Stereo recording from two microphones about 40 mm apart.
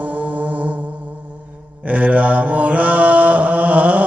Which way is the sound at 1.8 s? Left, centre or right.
Right.